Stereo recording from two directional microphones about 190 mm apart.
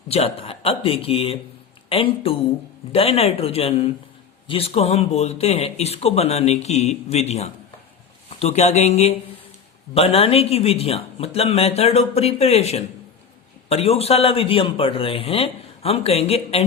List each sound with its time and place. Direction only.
0.1 s speech: 30° left (ahead or behind)